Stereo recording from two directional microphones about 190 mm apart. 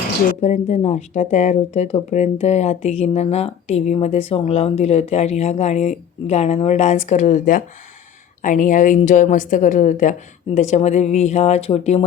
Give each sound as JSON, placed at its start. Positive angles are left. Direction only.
{"t": 0.4, "sound": "speech", "side_deg": 35}